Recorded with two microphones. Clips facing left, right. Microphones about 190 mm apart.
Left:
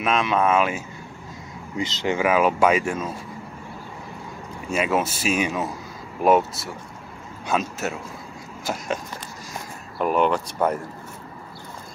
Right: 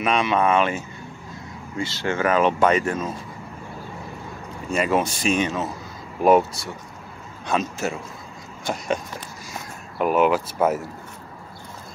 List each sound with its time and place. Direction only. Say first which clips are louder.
0.0 s speech: right 1 dB; centre (ahead or behind)
1.8 s speech: left 1 dB; 20° left (ahead or behind)
4.6 s speech: right 1 dB; 5° left (ahead or behind)